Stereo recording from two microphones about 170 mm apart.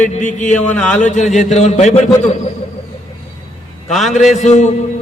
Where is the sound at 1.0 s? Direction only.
45° left (ahead or behind).